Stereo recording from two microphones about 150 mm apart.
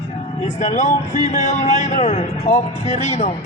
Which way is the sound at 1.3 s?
50° left (ahead or behind).